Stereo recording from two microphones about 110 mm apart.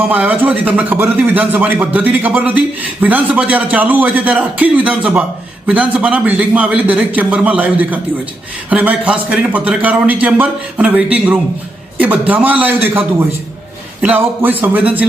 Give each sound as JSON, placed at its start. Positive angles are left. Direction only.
{"t": 0.1, "sound": "speech", "side_deg": -10}